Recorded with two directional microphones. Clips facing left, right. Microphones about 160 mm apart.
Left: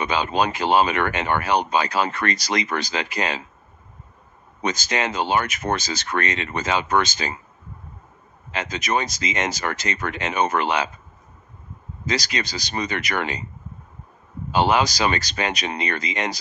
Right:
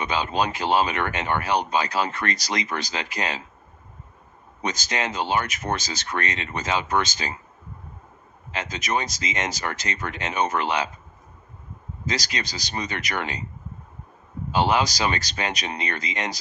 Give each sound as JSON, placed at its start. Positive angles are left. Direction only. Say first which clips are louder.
{"t": 0.0, "sound": "speech", "louder": "left 3 dB", "side_deg": 70}
{"t": 4.6, "sound": "speech", "louder": "left 3 dB", "side_deg": 70}
{"t": 8.5, "sound": "speech", "louder": "left 3 dB", "side_deg": 65}
{"t": 12.1, "sound": "speech", "louder": "left 4 dB", "side_deg": 70}
{"t": 14.5, "sound": "speech", "louder": "left 2 dB", "side_deg": 65}